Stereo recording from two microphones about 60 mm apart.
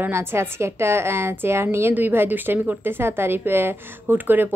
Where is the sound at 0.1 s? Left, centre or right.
Right.